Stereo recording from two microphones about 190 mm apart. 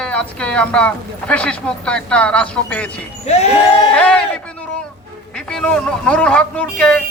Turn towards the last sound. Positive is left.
turn(degrees=5)  # may be behind; listen again after turning